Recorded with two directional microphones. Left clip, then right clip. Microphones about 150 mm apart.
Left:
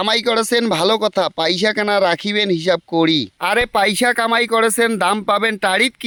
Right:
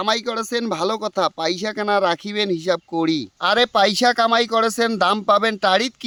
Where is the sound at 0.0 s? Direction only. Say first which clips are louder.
Left 5 dB; 30° left (ahead or behind).